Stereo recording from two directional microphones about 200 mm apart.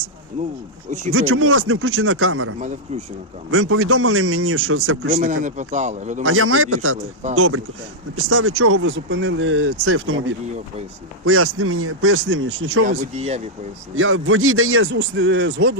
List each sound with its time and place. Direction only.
0.9 s a man's voice: 35° right (ahead or behind)
1.1 s speech: 90° right
2.6 s a man's voice: 40° right (ahead or behind)
3.5 s speech: 90° right
5.1 s a man's voice: 40° right (ahead or behind)
6.2 s speech: 90° right
11.3 s speech: 90° right
12.8 s a man's voice: 40° right (ahead or behind)
13.9 s a man's voice: 90° right; by 15.7 s 65° right (ahead or behind)